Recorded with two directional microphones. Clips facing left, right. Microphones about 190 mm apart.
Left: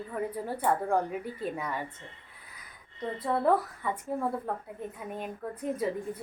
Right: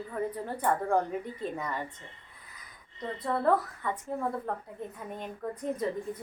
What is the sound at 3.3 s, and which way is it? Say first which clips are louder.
Speech: left 1 dB; 10° left (ahead or behind).